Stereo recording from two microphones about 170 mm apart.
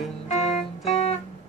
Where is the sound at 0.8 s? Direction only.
35° left (ahead or behind).